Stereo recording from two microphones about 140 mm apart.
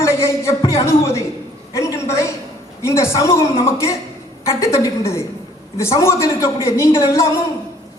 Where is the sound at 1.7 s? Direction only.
20° left (ahead or behind).